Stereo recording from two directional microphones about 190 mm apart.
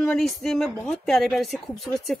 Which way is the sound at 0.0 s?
5° left (ahead or behind).